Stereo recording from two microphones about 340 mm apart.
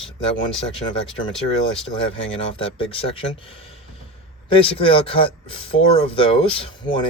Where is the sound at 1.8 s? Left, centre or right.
Centre.